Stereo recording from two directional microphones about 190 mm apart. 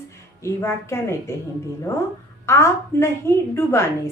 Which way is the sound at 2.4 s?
15° left (ahead or behind).